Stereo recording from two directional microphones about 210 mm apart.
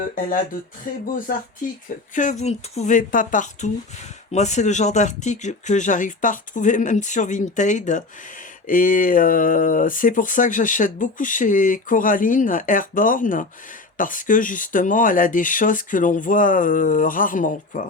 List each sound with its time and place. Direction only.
2.1 s speech: 35° left (ahead or behind)